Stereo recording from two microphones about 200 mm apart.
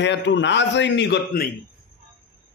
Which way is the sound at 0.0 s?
60° left (ahead or behind).